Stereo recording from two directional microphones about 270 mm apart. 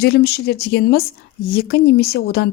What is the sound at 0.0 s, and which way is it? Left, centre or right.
A woman's voice, left.